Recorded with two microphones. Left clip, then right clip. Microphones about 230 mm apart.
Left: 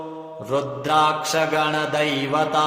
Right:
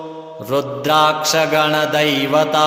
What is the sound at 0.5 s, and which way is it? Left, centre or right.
Mantra, right.